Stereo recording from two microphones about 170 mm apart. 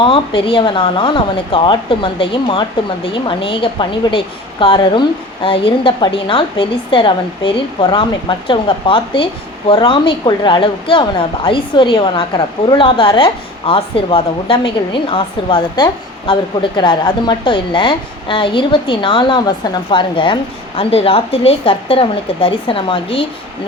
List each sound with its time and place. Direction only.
0.0 s a woman's voice: 30° left (ahead or behind)